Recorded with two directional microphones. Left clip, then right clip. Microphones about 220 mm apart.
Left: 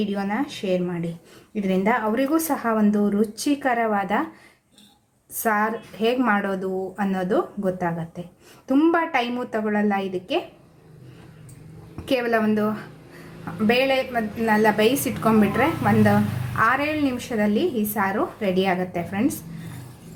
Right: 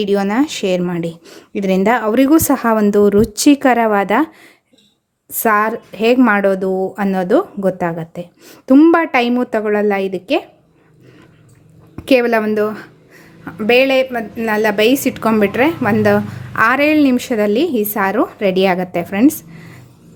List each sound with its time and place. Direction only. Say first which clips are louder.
0.0 s a woman's voice: right 11 dB; 50° right (ahead or behind)
5.4 s a woman's voice: right 8 dB; 45° right (ahead or behind)
12.0 s a woman's voice: right 9 dB; 40° right (ahead or behind)